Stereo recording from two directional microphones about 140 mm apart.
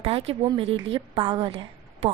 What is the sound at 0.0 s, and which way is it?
Speech, 45° right (ahead or behind).